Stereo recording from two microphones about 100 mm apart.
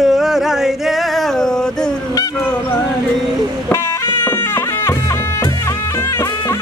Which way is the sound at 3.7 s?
25° left (ahead or behind).